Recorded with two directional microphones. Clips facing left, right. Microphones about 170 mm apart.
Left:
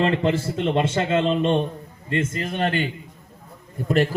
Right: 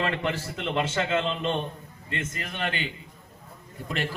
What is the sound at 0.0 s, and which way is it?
A man's voice, 30° left (ahead or behind).